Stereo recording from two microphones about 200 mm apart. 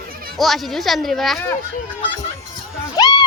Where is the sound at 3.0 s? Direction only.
20° left (ahead or behind).